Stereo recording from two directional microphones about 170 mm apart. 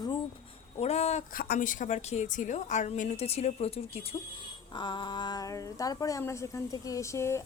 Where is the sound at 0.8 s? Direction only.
40° left (ahead or behind).